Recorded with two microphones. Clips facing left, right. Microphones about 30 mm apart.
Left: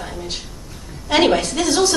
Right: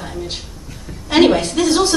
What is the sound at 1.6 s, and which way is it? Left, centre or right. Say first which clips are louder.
Speech: right 3 dB; right.